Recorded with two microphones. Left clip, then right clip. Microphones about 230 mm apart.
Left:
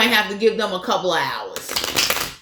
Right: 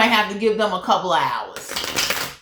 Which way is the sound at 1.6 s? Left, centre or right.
Centre.